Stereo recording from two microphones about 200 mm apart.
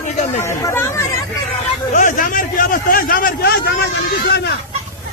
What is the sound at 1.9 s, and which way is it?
A man's voice, 40° left (ahead or behind).